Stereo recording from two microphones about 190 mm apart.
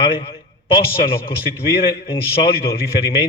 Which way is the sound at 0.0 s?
30° left (ahead or behind).